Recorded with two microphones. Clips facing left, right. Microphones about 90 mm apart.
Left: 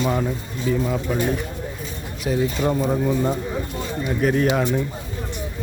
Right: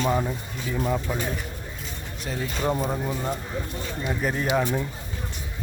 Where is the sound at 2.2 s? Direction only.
5° left (ahead or behind).